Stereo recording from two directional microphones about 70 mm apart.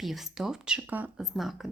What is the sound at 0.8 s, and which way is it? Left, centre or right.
Speech, right.